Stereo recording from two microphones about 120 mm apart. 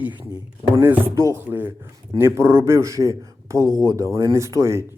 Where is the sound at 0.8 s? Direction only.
15° right (ahead or behind).